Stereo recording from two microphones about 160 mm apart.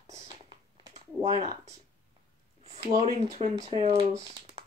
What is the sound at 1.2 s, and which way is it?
Speech, 45° right (ahead or behind).